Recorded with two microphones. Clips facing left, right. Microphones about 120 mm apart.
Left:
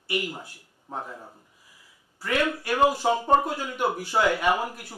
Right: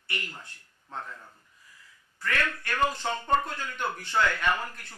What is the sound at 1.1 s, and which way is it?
Speech, 30° left (ahead or behind).